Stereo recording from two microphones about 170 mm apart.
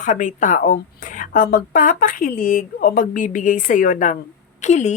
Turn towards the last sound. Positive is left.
turn(degrees=45)  # may be behind; listen again after turning